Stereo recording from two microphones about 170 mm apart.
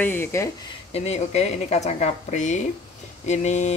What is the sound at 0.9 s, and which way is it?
A woman's voice, 40° left (ahead or behind).